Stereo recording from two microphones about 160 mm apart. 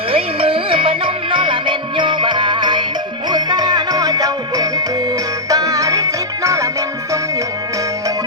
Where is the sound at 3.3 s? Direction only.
25° right (ahead or behind).